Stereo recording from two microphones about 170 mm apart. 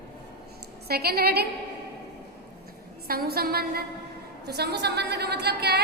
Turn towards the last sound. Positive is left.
turn(degrees=-70)  # may be behind; listen again after turning